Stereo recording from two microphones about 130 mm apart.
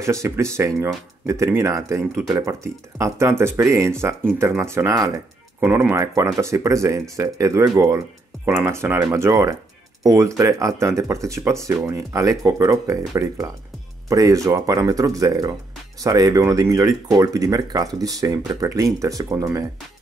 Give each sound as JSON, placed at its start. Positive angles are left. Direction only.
{"t": 0.0, "sound": "speech", "side_deg": -20}